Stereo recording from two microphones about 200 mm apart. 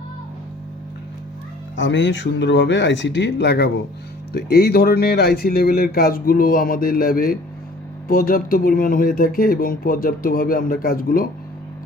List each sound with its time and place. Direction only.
1.7 s speech: 65° left (ahead or behind); by 11.3 s 45° left (ahead or behind)